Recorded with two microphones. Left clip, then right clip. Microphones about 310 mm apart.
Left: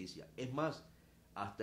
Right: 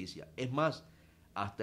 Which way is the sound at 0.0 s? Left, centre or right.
Right.